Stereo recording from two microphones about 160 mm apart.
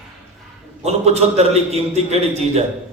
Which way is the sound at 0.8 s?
40° right (ahead or behind).